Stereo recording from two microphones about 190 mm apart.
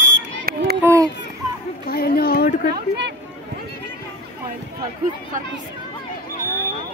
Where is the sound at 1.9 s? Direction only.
55° left (ahead or behind).